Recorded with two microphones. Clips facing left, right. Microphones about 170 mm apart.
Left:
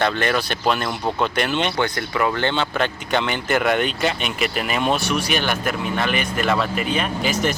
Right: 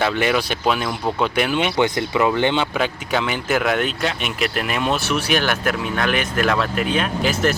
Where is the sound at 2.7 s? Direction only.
5° right (ahead or behind).